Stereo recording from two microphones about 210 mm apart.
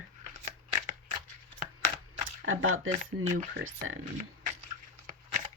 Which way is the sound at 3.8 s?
75° right (ahead or behind).